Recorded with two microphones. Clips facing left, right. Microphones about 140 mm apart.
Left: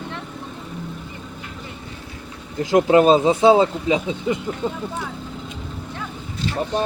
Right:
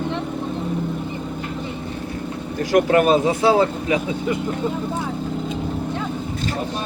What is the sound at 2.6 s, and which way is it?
Speech, 20° left (ahead or behind).